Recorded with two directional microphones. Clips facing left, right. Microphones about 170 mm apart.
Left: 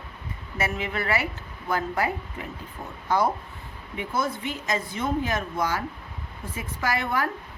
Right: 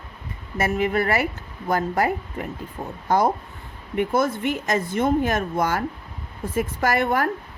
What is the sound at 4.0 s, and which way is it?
A woman's voice, 55° right (ahead or behind).